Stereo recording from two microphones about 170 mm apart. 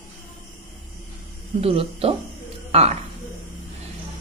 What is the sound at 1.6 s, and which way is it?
A woman's voice, 35° right (ahead or behind).